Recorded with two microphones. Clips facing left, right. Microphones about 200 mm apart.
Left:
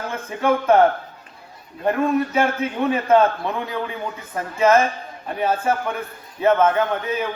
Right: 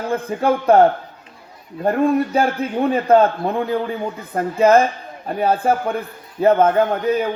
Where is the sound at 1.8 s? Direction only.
35° right (ahead or behind).